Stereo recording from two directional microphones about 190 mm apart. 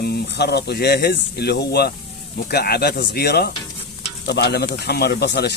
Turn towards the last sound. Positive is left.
turn(degrees=60)  # may be behind; listen again after turning